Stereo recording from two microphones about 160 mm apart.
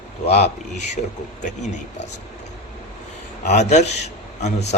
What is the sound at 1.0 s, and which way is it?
Speech, 50° left (ahead or behind).